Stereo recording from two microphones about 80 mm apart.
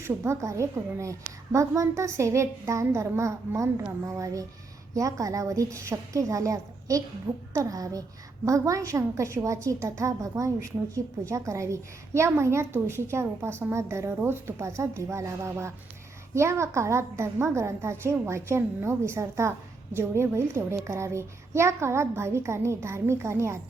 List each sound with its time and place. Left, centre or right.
0.0 s a woman's voice: right